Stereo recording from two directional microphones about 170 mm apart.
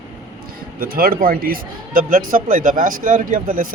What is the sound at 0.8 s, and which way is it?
Speech, 60° right (ahead or behind).